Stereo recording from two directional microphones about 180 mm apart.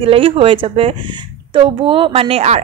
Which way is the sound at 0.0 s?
30° right (ahead or behind).